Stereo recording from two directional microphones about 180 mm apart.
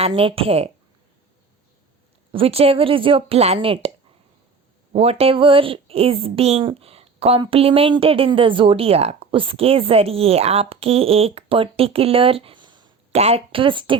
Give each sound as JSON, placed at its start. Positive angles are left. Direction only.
{"t": 0.0, "sound": "speech", "side_deg": -30}
{"t": 2.3, "sound": "speech", "side_deg": -30}
{"t": 4.9, "sound": "speech", "side_deg": -35}